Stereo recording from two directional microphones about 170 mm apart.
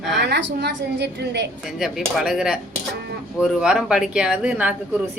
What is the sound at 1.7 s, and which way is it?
Speech, centre (ahead or behind).